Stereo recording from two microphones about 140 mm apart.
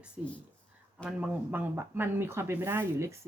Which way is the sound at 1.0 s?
10° right (ahead or behind).